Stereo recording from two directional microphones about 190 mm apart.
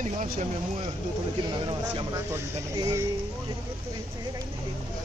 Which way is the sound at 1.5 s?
25° right (ahead or behind).